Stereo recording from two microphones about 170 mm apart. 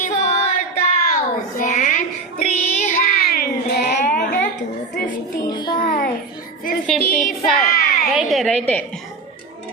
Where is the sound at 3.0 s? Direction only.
60° left (ahead or behind).